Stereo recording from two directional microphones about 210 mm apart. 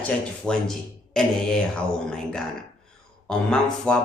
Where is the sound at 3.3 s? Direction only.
5° left (ahead or behind).